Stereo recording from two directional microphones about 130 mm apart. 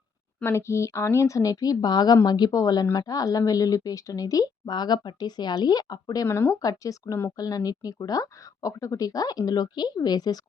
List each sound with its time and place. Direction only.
0.3 s speech: 20° left (ahead or behind)